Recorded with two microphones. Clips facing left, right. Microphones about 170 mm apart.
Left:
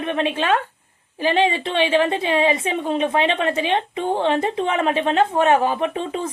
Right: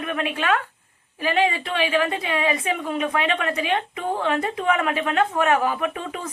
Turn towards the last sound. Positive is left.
turn(degrees=25)  # may be behind; listen again after turning